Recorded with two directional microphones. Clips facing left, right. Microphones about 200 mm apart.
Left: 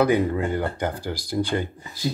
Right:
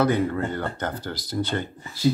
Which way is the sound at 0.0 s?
15° left (ahead or behind).